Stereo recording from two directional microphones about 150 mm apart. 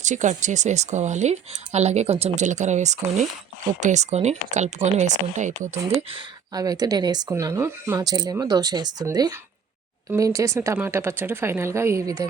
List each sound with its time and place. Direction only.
0.0 s speech: 55° right (ahead or behind)
6.5 s a woman's voice: 25° right (ahead or behind)